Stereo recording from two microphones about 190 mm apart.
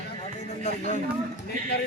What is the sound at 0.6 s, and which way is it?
Speech, 40° left (ahead or behind).